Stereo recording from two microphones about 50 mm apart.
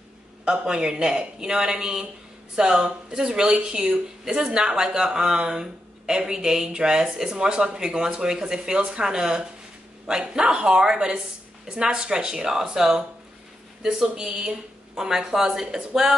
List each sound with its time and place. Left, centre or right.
0.5 s speech: centre